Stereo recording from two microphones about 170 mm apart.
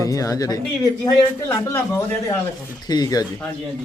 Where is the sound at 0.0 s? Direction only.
20° left (ahead or behind).